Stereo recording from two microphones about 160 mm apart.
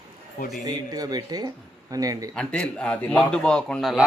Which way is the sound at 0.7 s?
25° right (ahead or behind).